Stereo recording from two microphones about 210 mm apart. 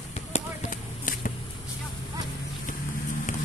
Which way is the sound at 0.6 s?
40° left (ahead or behind).